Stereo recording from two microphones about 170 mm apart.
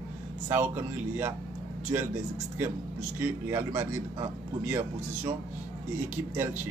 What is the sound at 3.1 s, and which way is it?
Speech, 15° right (ahead or behind).